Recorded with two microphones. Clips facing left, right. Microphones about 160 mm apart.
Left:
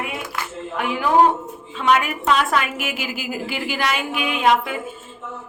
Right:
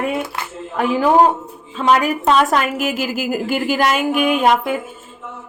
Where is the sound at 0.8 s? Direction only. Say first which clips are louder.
Right 3 dB; 40° right (ahead or behind).